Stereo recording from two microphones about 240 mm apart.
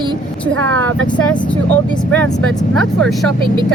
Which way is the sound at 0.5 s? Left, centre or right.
Right.